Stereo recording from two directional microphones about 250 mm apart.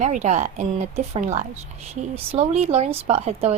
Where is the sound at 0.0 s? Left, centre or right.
Right.